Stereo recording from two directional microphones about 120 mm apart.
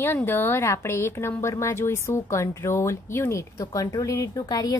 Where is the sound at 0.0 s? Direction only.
20° left (ahead or behind).